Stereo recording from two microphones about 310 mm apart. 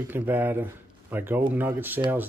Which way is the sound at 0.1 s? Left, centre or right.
Centre.